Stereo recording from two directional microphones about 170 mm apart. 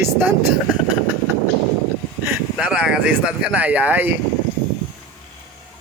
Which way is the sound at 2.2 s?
10° right (ahead or behind).